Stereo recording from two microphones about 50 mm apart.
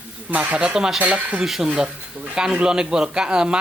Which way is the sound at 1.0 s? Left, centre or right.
Right.